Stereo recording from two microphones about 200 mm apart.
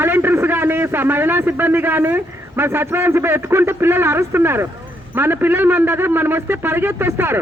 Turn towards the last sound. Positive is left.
turn(degrees=-10)  # may be behind; listen again after turning